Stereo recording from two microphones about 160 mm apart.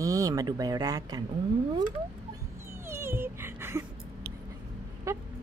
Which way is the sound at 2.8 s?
15° right (ahead or behind).